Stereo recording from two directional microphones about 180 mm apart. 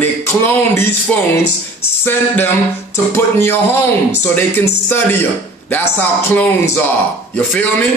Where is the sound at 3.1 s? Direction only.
15° left (ahead or behind).